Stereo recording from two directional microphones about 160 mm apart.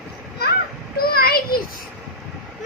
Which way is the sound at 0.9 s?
70° left (ahead or behind).